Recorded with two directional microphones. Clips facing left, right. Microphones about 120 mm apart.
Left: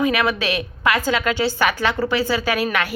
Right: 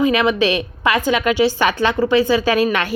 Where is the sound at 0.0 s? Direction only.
25° right (ahead or behind).